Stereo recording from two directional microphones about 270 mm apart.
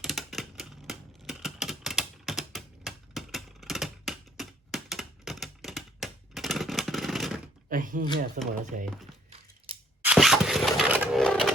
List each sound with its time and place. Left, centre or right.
0.0 s typewriter: centre
7.7 s speech: right
10.0 s a sound: centre